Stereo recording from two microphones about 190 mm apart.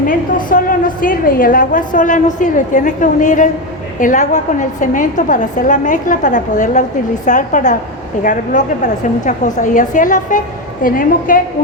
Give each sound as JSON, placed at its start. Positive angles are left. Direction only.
{"t": 0.0, "sound": "a woman's voice", "side_deg": 45}